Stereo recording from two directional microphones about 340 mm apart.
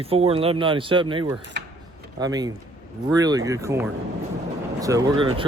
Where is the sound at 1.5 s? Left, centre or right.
Right.